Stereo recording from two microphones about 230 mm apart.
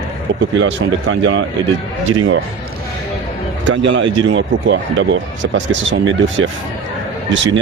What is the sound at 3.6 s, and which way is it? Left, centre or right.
Speech, right.